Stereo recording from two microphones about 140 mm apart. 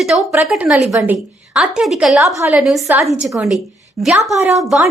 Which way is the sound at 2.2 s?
20° right (ahead or behind).